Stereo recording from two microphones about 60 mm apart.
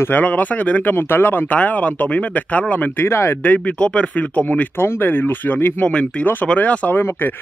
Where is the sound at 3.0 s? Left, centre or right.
Left.